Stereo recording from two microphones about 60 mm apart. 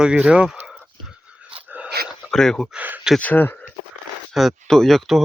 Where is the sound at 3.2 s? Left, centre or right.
Left.